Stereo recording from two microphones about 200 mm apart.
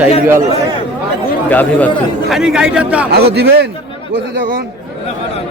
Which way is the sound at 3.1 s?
55° right (ahead or behind).